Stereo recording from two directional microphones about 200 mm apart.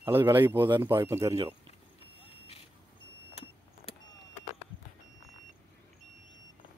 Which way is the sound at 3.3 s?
30° left (ahead or behind).